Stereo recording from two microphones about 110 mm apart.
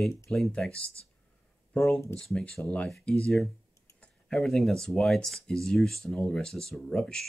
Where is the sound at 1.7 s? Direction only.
Centre (ahead or behind).